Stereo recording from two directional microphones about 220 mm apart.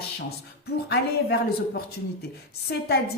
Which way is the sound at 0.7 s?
45° left (ahead or behind).